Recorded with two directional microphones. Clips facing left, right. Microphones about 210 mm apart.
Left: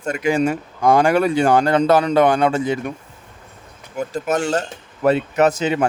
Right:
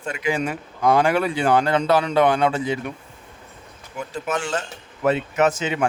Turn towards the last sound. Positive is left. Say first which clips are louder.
# left 4 dB
turn(degrees=40)  # may be behind; listen again after turning